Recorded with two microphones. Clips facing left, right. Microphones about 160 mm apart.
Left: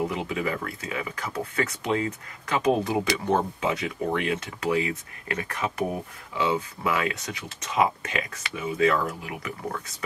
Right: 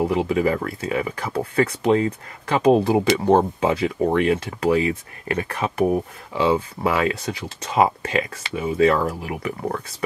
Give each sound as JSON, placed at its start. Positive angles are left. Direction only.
{"t": 0.1, "sound": "speech", "side_deg": -30}